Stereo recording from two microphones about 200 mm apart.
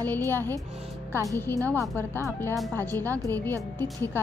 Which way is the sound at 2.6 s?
5° left (ahead or behind).